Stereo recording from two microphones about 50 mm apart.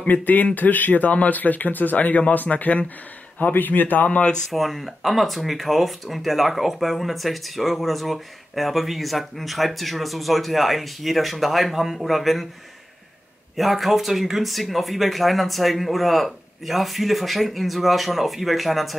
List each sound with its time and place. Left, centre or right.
0.0 s speech: left
4.5 s speech: centre
13.6 s speech: centre